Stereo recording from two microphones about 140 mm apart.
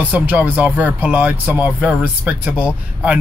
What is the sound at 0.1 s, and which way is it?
Speech, 10° right (ahead or behind).